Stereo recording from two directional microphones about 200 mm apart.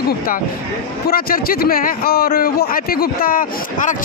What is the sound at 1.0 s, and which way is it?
Speech, 45° left (ahead or behind).